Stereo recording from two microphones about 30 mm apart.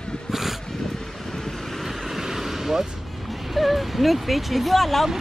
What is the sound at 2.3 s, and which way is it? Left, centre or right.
Vehicle, centre.